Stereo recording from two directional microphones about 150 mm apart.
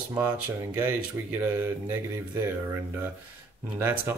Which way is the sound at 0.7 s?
10° right (ahead or behind).